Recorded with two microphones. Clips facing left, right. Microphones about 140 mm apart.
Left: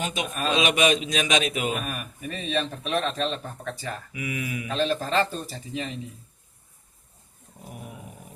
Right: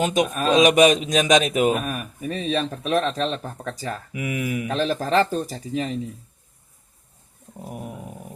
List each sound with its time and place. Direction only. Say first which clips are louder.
0.0 s speech: right 7 dB; 45° right (ahead or behind)